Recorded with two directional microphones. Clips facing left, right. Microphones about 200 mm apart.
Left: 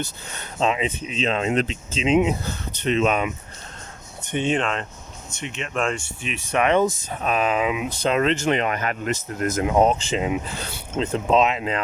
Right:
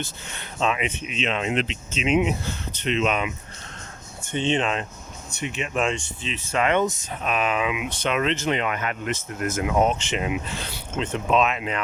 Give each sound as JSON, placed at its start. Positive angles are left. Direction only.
{"t": 0.3, "sound": "speech", "side_deg": 30}
{"t": 4.3, "sound": "speech", "side_deg": 15}
{"t": 5.5, "sound": "speech", "side_deg": -5}
{"t": 6.0, "sound": "speech", "side_deg": 15}
{"t": 7.2, "sound": "speech", "side_deg": 35}